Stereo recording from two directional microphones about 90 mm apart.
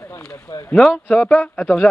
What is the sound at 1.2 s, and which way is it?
Speech, 20° left (ahead or behind).